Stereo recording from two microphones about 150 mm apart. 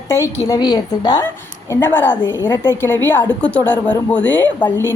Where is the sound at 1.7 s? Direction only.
15° left (ahead or behind).